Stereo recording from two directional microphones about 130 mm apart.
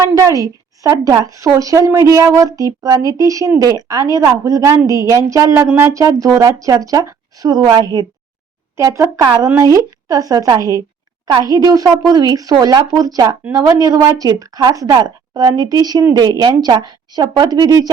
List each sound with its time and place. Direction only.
0.0 s a woman's voice: 25° right (ahead or behind)
8.7 s a woman's voice: 20° right (ahead or behind)